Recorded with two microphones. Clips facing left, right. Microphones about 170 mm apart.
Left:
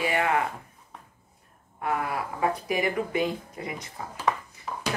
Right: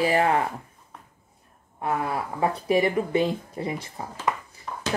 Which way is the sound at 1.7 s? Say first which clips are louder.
Right 2 dB; 30° right (ahead or behind).